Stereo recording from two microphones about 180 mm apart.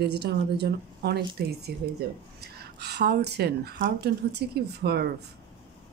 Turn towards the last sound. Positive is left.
turn(degrees=-65)  # may be behind; listen again after turning